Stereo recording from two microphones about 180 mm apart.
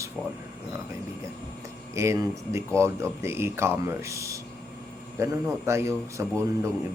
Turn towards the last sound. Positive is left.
turn(degrees=-15)  # may be behind; listen again after turning